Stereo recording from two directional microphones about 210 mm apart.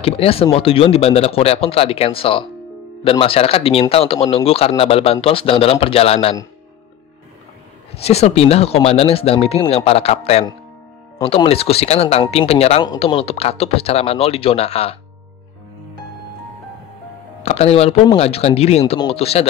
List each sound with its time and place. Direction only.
0.0 s speech: 25° left (ahead or behind)
8.0 s speech: 30° left (ahead or behind)
17.4 s speech: 30° left (ahead or behind)